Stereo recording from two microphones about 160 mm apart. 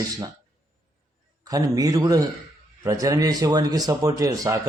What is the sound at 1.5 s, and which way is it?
Speech, 20° right (ahead or behind).